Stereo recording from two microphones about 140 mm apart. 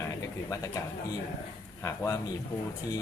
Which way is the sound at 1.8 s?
20° left (ahead or behind).